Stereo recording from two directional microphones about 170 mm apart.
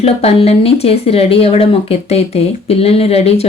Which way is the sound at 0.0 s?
35° left (ahead or behind).